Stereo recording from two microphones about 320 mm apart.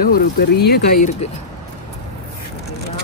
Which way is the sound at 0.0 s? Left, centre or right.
Left.